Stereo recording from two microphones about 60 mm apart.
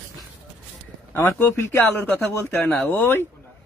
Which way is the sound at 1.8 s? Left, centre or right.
Left.